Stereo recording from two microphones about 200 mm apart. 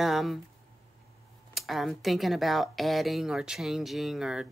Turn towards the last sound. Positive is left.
turn(degrees=-5)  # may be behind; listen again after turning